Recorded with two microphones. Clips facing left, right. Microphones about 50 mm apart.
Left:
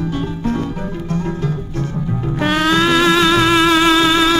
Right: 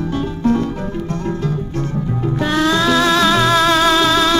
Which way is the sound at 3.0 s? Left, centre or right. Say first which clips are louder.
Left 1 dB; right.